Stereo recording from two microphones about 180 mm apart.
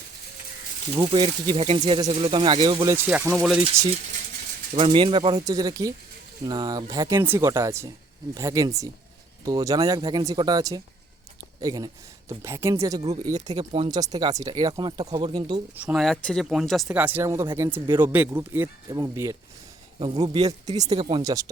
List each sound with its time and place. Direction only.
0.9 s speech: 25° right (ahead or behind)
2.9 s speech: 10° right (ahead or behind)
4.7 s speech: 30° right (ahead or behind)
13.2 s speech: 40° right (ahead or behind)
13.6 s speech: 25° right (ahead or behind)
15.7 s speech: 5° right (ahead or behind)
20.0 s speech: 25° right (ahead or behind)
20.7 s speech: 40° right (ahead or behind)
21.2 s speech: 20° right (ahead or behind)